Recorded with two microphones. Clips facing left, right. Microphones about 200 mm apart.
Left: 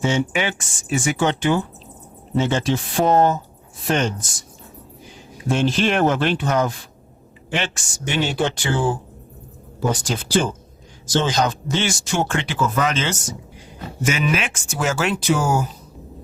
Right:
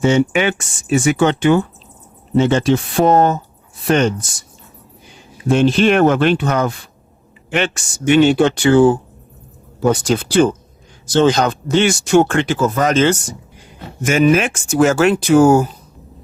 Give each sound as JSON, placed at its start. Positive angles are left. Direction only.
{"t": 0.0, "sound": "speech", "side_deg": -65}
{"t": 5.5, "sound": "speech", "side_deg": -65}